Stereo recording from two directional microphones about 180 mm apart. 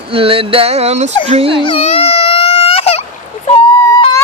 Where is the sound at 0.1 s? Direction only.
30° right (ahead or behind).